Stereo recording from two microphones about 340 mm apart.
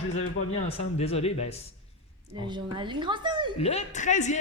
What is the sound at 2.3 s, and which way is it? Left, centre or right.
Speech, centre.